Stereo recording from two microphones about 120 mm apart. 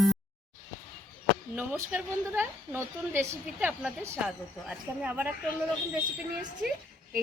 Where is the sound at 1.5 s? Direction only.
15° right (ahead or behind).